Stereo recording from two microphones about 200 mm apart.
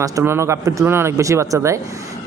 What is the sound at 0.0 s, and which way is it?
A man's voice, 15° right (ahead or behind).